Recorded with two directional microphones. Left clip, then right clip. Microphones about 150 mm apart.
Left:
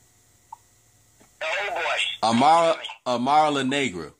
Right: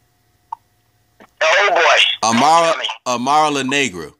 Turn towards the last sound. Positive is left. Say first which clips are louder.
# right 7 dB
turn(degrees=-15)  # may be behind; listen again after turning